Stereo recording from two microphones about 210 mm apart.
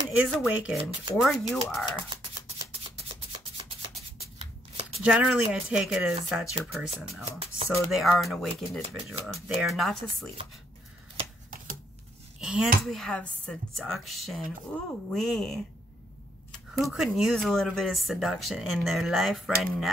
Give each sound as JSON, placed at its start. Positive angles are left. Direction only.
{"t": 0.2, "sound": "speech", "side_deg": -5}
{"t": 2.0, "sound": "a sound", "side_deg": -25}
{"t": 4.4, "sound": "shuffling cards", "side_deg": -30}
{"t": 5.0, "sound": "speech", "side_deg": -5}
{"t": 7.2, "sound": "speech", "side_deg": -30}
{"t": 7.7, "sound": "speech", "side_deg": 0}
{"t": 12.4, "sound": "a sound", "side_deg": -5}
{"t": 12.8, "sound": "speech", "side_deg": 5}
{"t": 16.8, "sound": "speech", "side_deg": 0}